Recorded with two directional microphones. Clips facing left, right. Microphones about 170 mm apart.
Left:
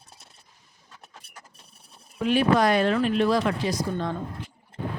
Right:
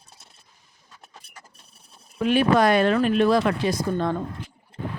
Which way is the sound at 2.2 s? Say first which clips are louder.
Right 2 dB; 60° right (ahead or behind).